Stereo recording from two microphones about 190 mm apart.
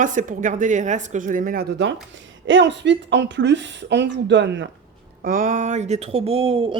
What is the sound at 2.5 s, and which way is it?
Speech, 70° right (ahead or behind).